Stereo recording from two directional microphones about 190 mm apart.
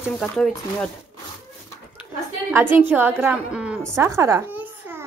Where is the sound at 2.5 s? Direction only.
10° right (ahead or behind).